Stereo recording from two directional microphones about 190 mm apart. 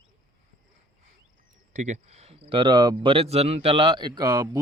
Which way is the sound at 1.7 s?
40° right (ahead or behind).